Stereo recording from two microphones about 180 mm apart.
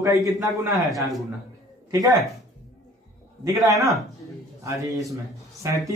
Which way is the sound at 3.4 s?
20° right (ahead or behind).